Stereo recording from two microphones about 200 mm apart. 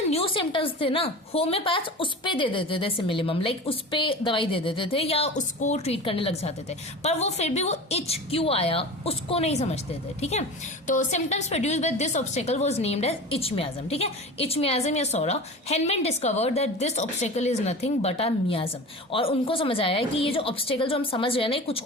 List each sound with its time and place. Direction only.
0.1 s a woman's voice: 25° left (ahead or behind)